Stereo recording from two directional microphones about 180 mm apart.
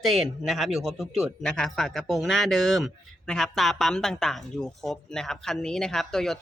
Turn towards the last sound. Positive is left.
turn(degrees=0)  # may be behind; listen again after turning